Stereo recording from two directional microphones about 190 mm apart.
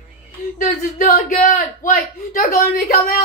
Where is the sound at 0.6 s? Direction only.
45° left (ahead or behind).